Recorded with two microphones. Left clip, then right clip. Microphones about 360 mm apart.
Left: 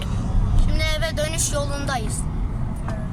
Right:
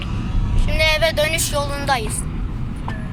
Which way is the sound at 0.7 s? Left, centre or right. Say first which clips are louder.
Right 9 dB; centre.